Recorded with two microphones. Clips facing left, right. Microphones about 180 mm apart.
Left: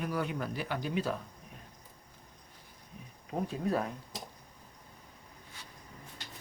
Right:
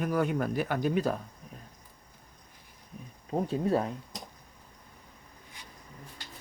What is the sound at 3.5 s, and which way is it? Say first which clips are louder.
Speech: right 5 dB; 30° right (ahead or behind).